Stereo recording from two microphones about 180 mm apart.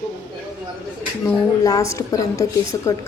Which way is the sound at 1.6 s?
20° left (ahead or behind).